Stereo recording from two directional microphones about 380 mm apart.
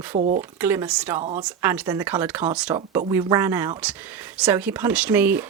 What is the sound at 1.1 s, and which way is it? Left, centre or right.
Speech, centre.